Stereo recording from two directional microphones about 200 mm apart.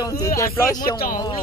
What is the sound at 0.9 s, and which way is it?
Speech, 45° left (ahead or behind).